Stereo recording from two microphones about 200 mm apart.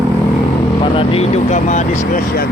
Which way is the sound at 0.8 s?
25° left (ahead or behind).